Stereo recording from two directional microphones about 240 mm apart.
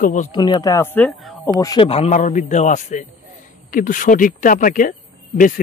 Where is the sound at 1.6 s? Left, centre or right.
Centre.